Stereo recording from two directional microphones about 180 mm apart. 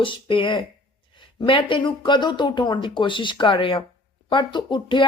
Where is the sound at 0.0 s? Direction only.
30° left (ahead or behind).